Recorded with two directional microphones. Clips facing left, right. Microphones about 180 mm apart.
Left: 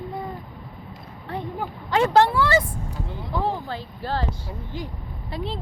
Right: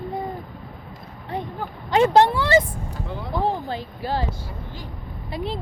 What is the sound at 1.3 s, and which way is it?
Speech, 15° right (ahead or behind).